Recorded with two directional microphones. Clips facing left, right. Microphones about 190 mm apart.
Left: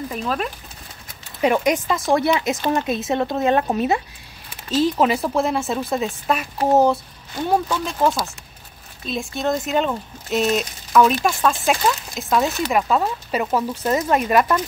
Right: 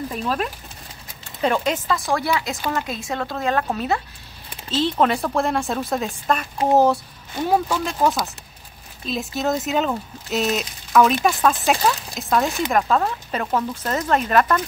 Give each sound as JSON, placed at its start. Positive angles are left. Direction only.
{"t": 0.1, "sound": "speech", "side_deg": 0}
{"t": 1.4, "sound": "a woman's voice", "side_deg": 15}